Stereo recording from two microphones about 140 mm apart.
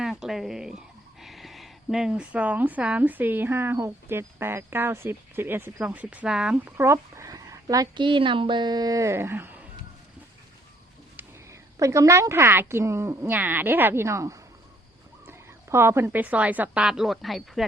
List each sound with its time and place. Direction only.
0.0 s speech: 5° right (ahead or behind)
11.2 s a woman's voice: 20° right (ahead or behind); by 17.7 s centre (ahead or behind)